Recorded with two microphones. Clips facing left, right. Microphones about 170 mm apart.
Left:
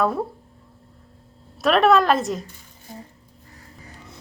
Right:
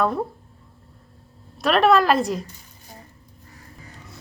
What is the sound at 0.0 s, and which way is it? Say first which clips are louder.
Speech: even; centre (ahead or behind).